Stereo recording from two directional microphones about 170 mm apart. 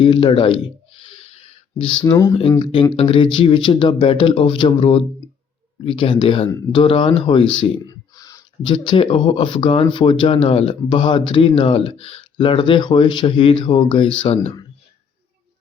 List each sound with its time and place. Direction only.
0.0 s speech: 30° left (ahead or behind)
2.0 s speech: 25° left (ahead or behind)